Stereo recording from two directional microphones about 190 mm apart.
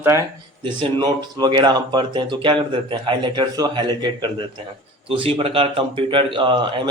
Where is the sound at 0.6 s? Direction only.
25° right (ahead or behind).